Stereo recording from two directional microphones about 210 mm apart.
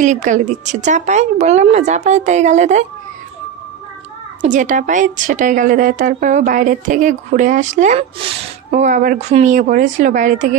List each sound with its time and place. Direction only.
0.0 s a woman's voice: 35° right (ahead or behind)
4.4 s a woman's voice: 35° right (ahead or behind)